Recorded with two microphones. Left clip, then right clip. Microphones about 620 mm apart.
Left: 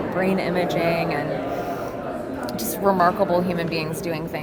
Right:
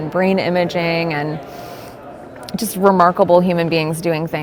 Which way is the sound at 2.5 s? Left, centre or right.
Right.